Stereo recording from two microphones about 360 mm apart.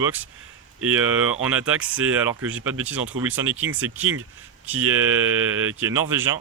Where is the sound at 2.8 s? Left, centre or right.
Centre.